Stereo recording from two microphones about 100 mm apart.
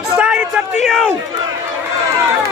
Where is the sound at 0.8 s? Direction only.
5° left (ahead or behind).